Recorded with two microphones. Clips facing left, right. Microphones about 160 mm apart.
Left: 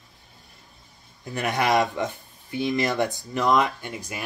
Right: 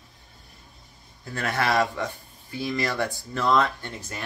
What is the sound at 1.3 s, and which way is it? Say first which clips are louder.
Speech: left 3 dB; 15° left (ahead or behind).